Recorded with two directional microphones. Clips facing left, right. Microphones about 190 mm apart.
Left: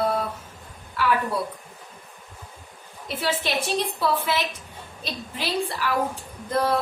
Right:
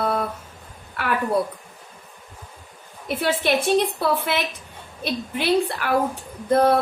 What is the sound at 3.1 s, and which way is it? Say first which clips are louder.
A woman's voice: right 5 dB; 55° right (ahead or behind).